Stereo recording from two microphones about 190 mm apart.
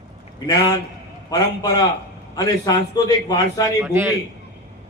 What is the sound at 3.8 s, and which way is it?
Speech, 10° right (ahead or behind).